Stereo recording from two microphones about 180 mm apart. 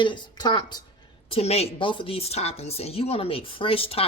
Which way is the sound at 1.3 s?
35° left (ahead or behind).